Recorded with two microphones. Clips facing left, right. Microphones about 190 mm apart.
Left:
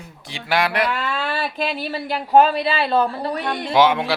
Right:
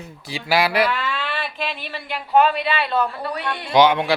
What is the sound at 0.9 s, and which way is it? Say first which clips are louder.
Speech: left 2 dB; 45° left (ahead or behind).